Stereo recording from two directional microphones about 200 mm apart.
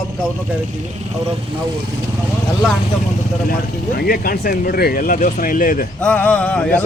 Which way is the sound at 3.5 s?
50° left (ahead or behind).